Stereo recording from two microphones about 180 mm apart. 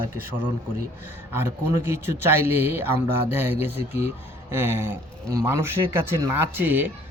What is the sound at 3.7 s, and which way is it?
Speech, 35° left (ahead or behind).